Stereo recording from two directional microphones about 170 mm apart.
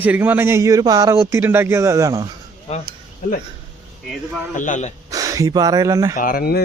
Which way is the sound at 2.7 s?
35° left (ahead or behind).